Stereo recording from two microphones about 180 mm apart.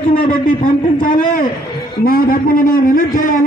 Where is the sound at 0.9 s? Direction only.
50° left (ahead or behind).